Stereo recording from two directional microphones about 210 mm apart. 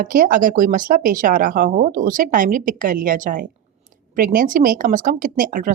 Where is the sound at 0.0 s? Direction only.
45° right (ahead or behind).